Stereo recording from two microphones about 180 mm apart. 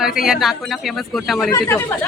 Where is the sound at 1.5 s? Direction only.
15° left (ahead or behind).